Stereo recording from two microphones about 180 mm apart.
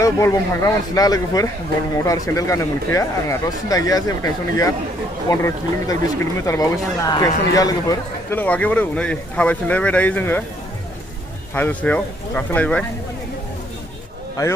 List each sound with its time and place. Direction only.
0.0 s speech: 15° left (ahead or behind)
8.4 s speech: 10° left (ahead or behind)
11.5 s speech: 10° left (ahead or behind)